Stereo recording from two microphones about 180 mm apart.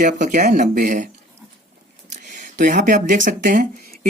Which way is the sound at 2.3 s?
45° right (ahead or behind).